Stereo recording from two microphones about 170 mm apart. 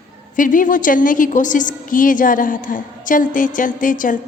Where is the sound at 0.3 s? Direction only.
50° left (ahead or behind).